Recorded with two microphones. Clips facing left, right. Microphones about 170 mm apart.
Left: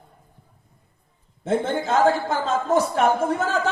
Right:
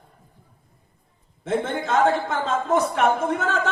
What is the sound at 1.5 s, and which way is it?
A man's voice, 35° left (ahead or behind).